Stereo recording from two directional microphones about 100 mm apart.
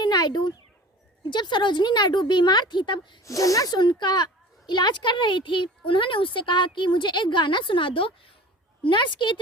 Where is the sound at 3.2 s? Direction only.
35° left (ahead or behind); by 8.3 s 65° left (ahead or behind).